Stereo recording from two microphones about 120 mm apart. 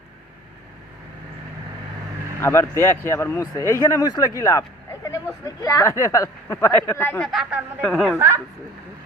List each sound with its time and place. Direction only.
2.4 s speech: 20° left (ahead or behind)
4.0 s speech: 35° left (ahead or behind); by 7.2 s 20° left (ahead or behind)
7.2 s a woman's voice: centre (ahead or behind)
7.8 s a woman's voice: 10° left (ahead or behind)